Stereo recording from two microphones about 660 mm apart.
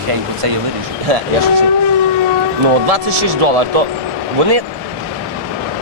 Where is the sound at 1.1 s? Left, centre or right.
Right.